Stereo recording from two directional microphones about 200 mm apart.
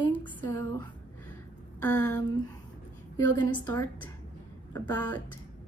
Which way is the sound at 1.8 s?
10° left (ahead or behind).